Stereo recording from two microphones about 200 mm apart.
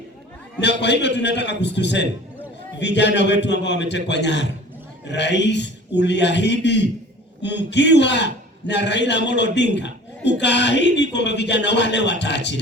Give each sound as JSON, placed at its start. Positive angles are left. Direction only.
{"t": 0.8, "sound": "a man's voice", "side_deg": 60}